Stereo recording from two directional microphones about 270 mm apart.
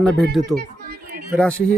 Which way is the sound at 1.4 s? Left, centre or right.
Centre.